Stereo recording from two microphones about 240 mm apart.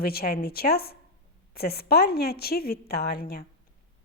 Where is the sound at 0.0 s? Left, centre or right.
Left.